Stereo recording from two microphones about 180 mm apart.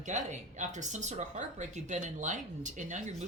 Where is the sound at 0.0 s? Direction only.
45° right (ahead or behind).